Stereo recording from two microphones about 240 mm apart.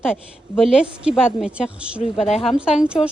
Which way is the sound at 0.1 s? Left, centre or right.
Centre.